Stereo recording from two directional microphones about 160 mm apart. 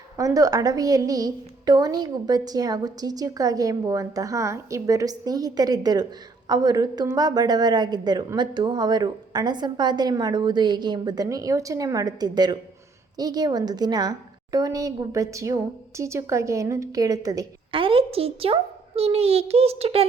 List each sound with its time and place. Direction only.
0.2 s a woman's voice: 20° right (ahead or behind)
17.7 s a child's voice: 35° right (ahead or behind)